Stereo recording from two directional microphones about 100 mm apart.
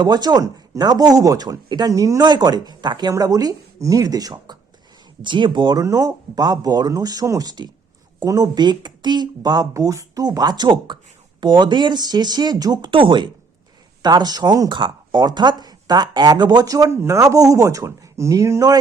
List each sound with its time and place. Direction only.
0.0 s speech: 45° right (ahead or behind)
5.2 s speech: 50° right (ahead or behind)
5.8 s speech: 35° right (ahead or behind)
12.9 s speech: 55° right (ahead or behind); by 18.8 s 35° right (ahead or behind)